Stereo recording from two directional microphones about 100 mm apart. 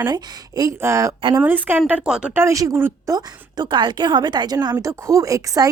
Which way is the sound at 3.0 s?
40° right (ahead or behind).